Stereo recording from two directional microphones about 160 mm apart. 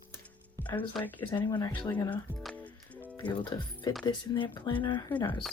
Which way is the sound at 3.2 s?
30° left (ahead or behind).